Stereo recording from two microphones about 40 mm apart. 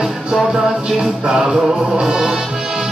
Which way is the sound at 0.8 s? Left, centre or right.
Centre.